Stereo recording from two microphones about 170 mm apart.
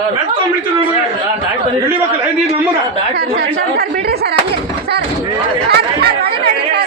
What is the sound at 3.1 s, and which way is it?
Speech, 65° right (ahead or behind).